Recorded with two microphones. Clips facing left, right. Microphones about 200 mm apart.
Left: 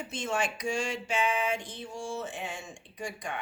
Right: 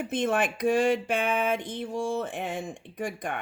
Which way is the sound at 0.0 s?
55° right (ahead or behind).